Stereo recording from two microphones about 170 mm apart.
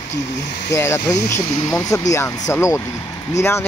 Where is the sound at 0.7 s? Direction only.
15° left (ahead or behind).